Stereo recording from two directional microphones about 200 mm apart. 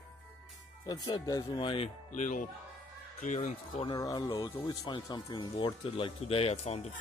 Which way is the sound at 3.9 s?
20° left (ahead or behind).